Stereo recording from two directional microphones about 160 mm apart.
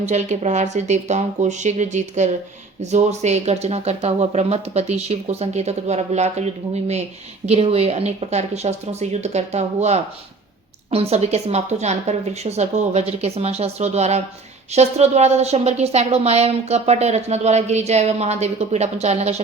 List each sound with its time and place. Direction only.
0.0 s a woman's voice: 45° right (ahead or behind)